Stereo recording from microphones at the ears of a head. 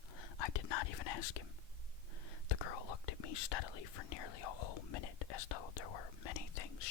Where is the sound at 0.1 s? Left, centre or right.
Left.